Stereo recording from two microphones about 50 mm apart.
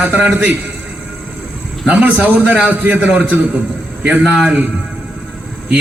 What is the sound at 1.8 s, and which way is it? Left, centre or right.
A man's voice, right.